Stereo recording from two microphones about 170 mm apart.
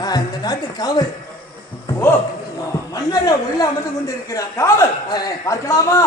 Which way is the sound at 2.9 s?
20° left (ahead or behind).